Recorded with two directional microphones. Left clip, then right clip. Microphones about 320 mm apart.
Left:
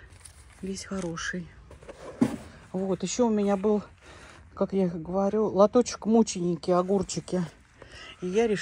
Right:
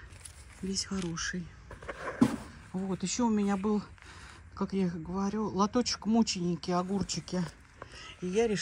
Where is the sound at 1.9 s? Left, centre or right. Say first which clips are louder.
Right 4 dB; centre.